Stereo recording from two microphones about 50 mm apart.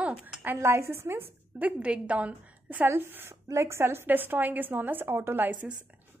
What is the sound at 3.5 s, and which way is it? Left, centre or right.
Speech, right.